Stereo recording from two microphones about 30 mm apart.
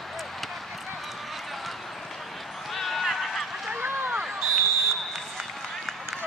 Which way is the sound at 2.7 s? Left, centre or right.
Centre.